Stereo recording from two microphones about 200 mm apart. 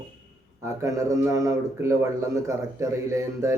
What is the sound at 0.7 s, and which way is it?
Speech, 15° right (ahead or behind).